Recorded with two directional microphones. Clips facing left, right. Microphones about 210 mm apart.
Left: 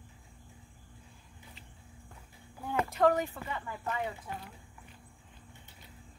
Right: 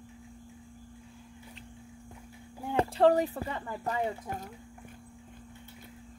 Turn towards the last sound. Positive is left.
turn(degrees=-40)  # may be behind; listen again after turning